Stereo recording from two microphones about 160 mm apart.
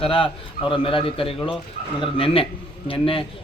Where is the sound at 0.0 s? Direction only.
35° left (ahead or behind).